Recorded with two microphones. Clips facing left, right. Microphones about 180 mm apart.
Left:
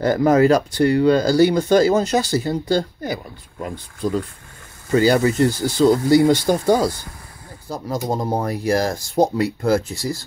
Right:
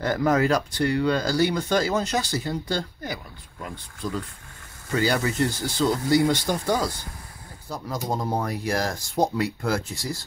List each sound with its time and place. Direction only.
0.0 s speech: 35° left (ahead or behind)